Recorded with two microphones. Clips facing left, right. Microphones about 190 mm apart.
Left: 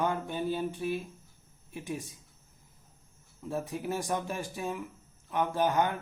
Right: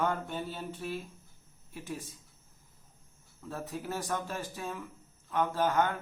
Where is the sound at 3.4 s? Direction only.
15° left (ahead or behind).